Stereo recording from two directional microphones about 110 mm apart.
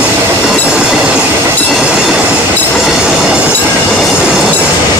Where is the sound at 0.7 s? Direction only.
10° right (ahead or behind).